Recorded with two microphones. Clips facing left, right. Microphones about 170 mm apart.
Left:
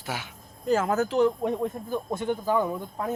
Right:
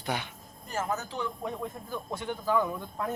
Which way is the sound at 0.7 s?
90° left.